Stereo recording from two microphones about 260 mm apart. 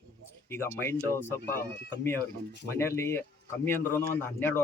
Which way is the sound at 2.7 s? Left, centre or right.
Centre.